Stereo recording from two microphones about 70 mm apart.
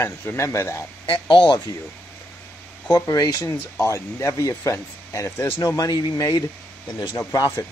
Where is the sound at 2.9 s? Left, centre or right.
Left.